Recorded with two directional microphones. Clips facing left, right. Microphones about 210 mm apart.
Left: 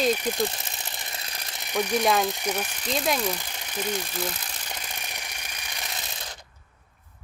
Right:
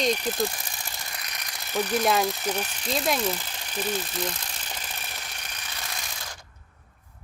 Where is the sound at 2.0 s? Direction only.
Centre (ahead or behind).